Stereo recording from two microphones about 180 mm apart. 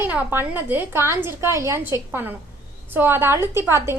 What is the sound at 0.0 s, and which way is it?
A woman's voice, 10° right (ahead or behind).